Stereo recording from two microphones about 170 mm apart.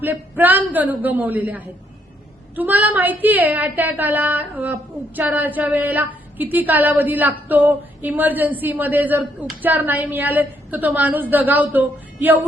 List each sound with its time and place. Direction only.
0.0 s a woman's voice: 10° right (ahead or behind)